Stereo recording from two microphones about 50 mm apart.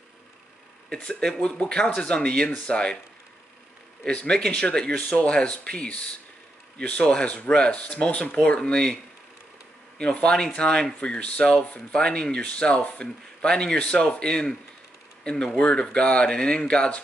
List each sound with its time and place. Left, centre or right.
1.0 s speech: centre
4.1 s speech: left
9.9 s speech: left